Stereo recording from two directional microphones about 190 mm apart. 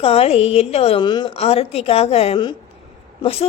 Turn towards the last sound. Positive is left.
turn(degrees=30)  # may be behind; listen again after turning